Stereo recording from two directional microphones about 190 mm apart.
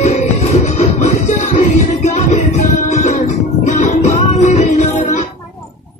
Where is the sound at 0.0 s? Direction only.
35° left (ahead or behind).